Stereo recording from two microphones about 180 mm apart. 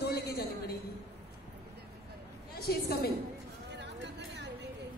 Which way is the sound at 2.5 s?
60° left (ahead or behind).